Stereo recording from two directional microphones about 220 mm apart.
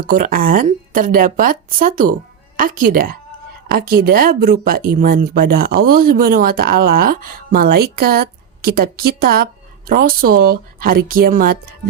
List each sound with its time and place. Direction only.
0.0 s a woman's voice: 40° right (ahead or behind)